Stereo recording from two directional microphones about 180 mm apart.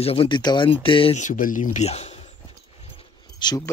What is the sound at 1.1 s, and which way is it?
Speech, 45° left (ahead or behind).